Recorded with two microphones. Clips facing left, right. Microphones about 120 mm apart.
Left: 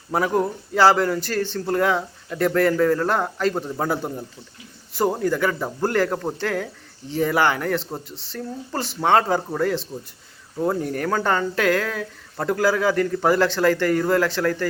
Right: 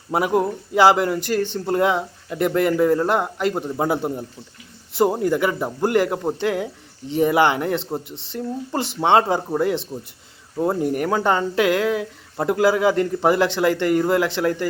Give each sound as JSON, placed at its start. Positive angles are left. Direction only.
{"t": 0.1, "sound": "speech", "side_deg": -15}